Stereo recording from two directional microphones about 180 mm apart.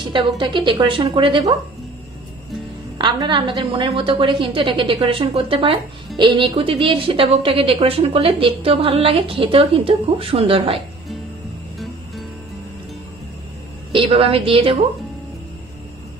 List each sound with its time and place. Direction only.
0.4 s a woman's voice: 25° right (ahead or behind)
3.0 s a woman's voice: 25° right (ahead or behind)
13.9 s a woman's voice: 30° right (ahead or behind)